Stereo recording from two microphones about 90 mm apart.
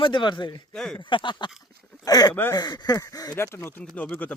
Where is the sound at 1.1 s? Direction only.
65° left (ahead or behind).